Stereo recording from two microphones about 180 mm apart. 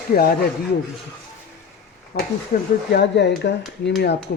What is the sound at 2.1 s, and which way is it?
Speech, 65° left (ahead or behind).